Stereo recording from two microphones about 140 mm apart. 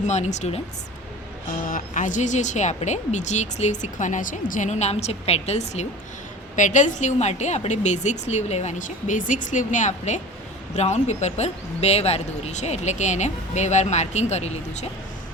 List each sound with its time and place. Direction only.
0.0 s a woman's voice: 55° left (ahead or behind)
1.6 s a woman's voice: 70° left (ahead or behind); by 14.8 s 50° left (ahead or behind)